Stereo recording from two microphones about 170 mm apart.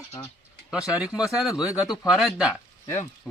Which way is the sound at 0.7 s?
5° right (ahead or behind).